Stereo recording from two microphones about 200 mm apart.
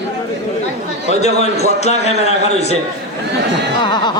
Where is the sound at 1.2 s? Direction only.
35° left (ahead or behind).